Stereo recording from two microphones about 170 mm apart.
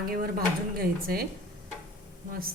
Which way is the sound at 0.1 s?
60° right (ahead or behind).